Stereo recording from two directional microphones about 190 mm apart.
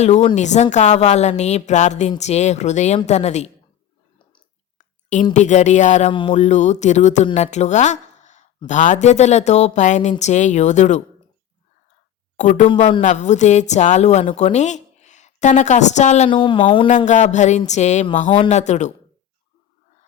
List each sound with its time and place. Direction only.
0.0 s speech: 35° left (ahead or behind)
4.8 s a sound: 40° left (ahead or behind)
5.3 s speech: 40° left (ahead or behind)
6.1 s speech: 25° left (ahead or behind)
6.4 s speech: 40° left (ahead or behind)
12.4 s speech: 40° left (ahead or behind)
17.1 s speech: 40° left (ahead or behind)